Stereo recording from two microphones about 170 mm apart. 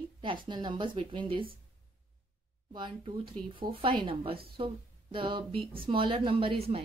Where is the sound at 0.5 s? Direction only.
30° right (ahead or behind).